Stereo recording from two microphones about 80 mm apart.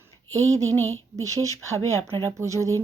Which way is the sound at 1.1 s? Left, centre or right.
Right.